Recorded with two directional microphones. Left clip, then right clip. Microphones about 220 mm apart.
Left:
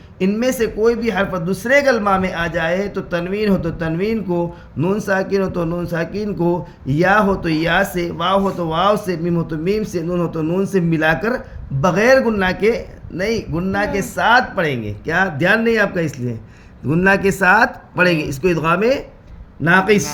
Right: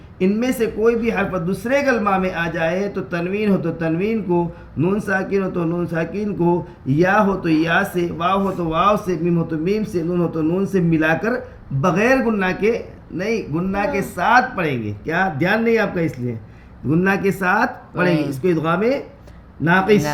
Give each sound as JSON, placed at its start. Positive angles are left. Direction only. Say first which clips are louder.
{"t": 0.2, "sound": "a man's voice", "louder": "left 2 dB", "side_deg": 50}